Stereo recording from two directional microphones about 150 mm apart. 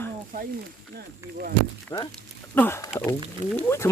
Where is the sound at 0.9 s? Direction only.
80° right.